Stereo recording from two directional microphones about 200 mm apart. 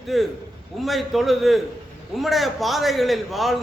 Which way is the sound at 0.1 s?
Centre (ahead or behind).